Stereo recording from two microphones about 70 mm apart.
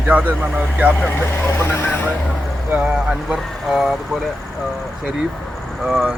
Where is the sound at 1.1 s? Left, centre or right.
Left.